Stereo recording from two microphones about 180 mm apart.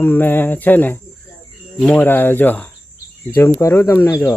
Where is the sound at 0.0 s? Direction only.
10° left (ahead or behind).